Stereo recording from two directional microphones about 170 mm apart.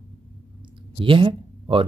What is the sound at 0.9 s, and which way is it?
Speech, 30° right (ahead or behind).